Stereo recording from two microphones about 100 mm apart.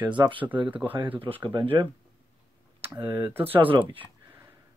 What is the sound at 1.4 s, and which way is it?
Speech, 50° right (ahead or behind).